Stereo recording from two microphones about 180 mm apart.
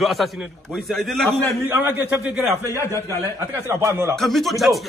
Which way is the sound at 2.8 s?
15° left (ahead or behind).